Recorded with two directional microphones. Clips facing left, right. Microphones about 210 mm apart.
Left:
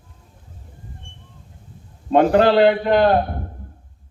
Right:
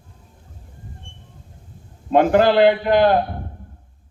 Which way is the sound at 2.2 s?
35° left (ahead or behind).